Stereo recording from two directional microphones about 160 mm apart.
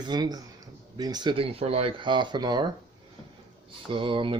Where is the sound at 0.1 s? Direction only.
25° right (ahead or behind).